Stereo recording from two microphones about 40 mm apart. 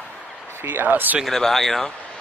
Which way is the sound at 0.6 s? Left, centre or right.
Right.